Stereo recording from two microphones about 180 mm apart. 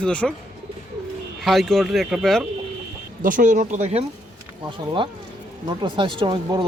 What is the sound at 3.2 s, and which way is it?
Speech, 45° right (ahead or behind).